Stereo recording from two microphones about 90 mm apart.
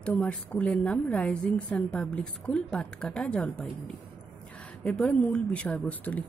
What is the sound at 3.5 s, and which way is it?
Speech, centre (ahead or behind).